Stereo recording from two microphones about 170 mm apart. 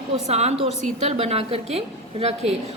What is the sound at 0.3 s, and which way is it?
A woman's voice, 40° right (ahead or behind).